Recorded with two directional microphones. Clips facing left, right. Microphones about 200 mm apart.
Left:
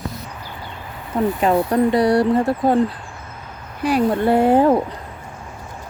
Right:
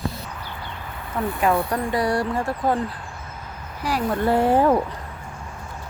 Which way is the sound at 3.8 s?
20° left (ahead or behind).